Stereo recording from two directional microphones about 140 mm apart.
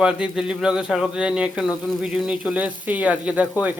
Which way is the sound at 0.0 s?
5° right (ahead or behind).